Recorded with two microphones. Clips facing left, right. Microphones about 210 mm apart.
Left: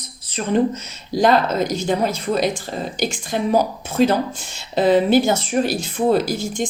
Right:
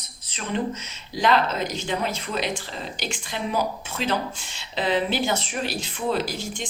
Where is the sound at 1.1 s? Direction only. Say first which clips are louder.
Left 6 dB; 40° left (ahead or behind).